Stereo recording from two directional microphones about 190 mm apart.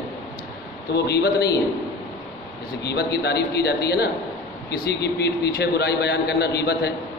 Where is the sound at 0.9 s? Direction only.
60° left (ahead or behind).